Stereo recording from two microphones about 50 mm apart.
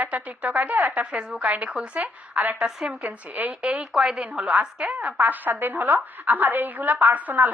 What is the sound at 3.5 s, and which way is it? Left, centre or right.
Speech, centre.